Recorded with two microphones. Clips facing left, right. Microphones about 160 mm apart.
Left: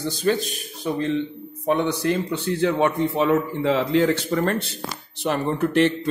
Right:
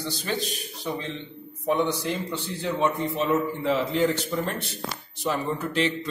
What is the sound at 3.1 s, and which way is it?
Speech, 80° left.